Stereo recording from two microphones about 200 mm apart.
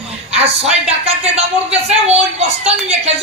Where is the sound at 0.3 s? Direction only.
30° right (ahead or behind).